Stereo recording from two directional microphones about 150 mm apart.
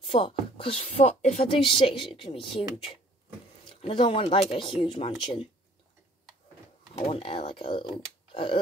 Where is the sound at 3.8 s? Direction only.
35° left (ahead or behind).